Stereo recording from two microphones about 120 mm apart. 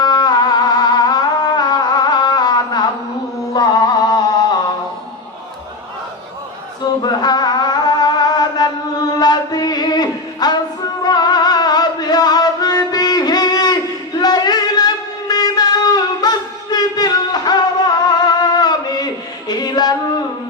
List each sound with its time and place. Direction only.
0.0 s music: 35° left (ahead or behind)
7.0 s music: 35° left (ahead or behind)
14.2 s a sound: 35° left (ahead or behind)